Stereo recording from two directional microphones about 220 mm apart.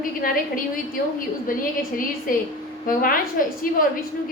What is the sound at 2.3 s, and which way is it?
A woman's voice, 40° left (ahead or behind).